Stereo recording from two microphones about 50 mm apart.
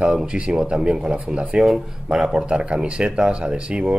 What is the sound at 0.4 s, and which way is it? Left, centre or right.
Speech, right.